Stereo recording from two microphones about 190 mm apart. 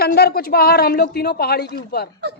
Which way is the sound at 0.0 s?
55° left (ahead or behind).